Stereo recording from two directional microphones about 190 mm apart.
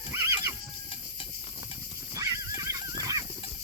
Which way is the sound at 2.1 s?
20° right (ahead or behind).